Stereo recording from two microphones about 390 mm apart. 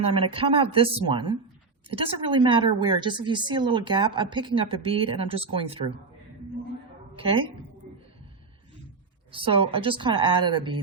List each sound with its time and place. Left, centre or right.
0.0 s a woman's voice: centre
7.2 s a woman's voice: centre
9.3 s a woman's voice: centre